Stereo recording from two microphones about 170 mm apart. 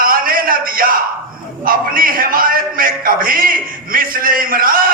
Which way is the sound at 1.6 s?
55° right (ahead or behind).